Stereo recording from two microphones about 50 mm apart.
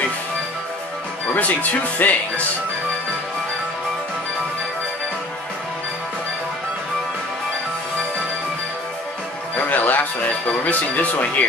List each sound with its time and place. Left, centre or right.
1.3 s speech: left
9.7 s speech: left